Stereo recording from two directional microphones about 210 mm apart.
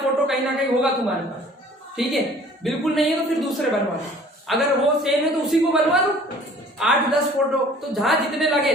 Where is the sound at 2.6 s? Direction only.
Centre (ahead or behind).